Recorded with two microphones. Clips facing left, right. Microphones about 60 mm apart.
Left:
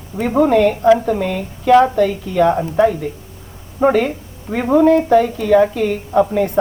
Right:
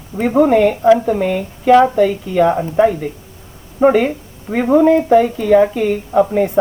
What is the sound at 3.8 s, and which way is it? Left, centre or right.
A woman's voice, centre.